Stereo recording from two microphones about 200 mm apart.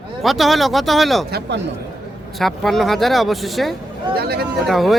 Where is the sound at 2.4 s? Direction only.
Centre (ahead or behind).